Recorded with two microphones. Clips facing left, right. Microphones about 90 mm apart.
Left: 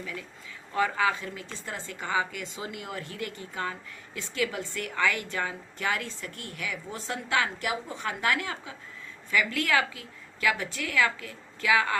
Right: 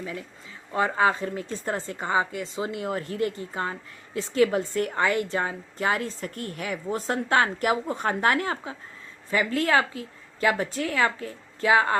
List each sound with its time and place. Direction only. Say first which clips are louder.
0.0 s a woman's voice: right 4 dB; 30° right (ahead or behind)